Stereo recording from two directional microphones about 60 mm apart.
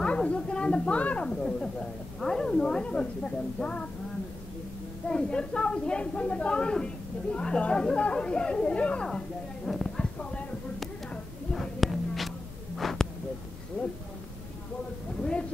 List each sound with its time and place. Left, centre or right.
0.0 s a sound: centre
1.2 s a woman's voice: centre
5.0 s a woman's voice: centre
9.7 s clip-clop: centre
11.5 s music: centre
12.7 s a sound: centre